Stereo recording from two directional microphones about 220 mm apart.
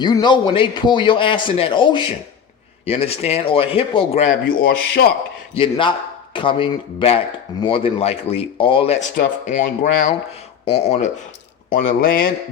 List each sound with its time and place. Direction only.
0.0 s a man's voice: 20° left (ahead or behind)
4.5 s speech: 45° left (ahead or behind)
5.5 s a man's voice: 20° left (ahead or behind); by 12.3 s 40° left (ahead or behind)